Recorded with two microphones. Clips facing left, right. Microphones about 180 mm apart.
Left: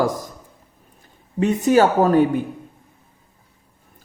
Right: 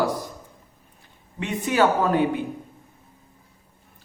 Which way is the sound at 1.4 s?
40° left (ahead or behind).